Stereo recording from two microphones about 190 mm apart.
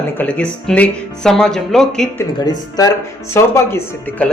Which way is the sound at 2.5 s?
20° left (ahead or behind).